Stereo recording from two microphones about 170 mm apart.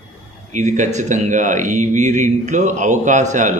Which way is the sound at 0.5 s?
45° right (ahead or behind).